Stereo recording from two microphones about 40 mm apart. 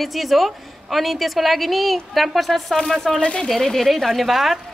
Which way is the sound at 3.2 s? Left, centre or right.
Left.